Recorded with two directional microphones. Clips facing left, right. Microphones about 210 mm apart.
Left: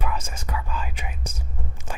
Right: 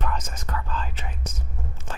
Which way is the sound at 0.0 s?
10° left (ahead or behind).